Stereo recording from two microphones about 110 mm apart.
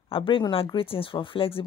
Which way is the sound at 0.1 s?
50° left (ahead or behind).